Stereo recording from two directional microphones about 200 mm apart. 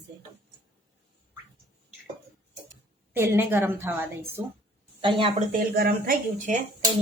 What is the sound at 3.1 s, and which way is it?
A woman's voice, 10° right (ahead or behind).